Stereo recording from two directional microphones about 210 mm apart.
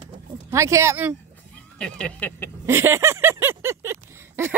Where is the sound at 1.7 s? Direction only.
5° left (ahead or behind).